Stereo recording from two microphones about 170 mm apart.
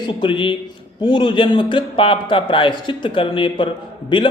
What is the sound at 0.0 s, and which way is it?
A man's voice, 30° left (ahead or behind).